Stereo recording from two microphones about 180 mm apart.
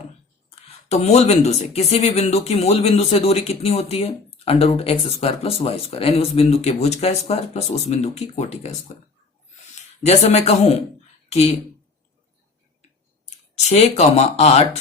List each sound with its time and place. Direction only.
0.9 s speech: 35° left (ahead or behind)
10.0 s speech: 35° left (ahead or behind)
13.7 s speech: 35° left (ahead or behind)